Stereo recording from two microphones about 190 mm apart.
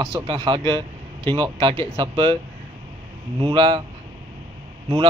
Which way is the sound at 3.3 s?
25° right (ahead or behind).